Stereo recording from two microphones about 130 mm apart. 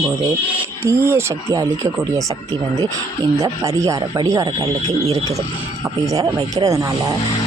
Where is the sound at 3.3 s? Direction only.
25° right (ahead or behind).